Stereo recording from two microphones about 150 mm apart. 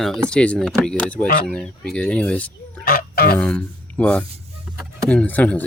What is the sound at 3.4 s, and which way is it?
Speech, 10° left (ahead or behind).